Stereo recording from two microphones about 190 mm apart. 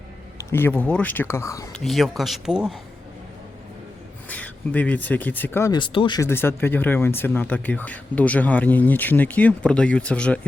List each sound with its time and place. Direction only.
0.3 s speech: 10° left (ahead or behind)
1.7 s speech: centre (ahead or behind)
4.3 s speech: 10° left (ahead or behind); by 6.2 s 25° left (ahead or behind)
6.2 s speech: 10° left (ahead or behind)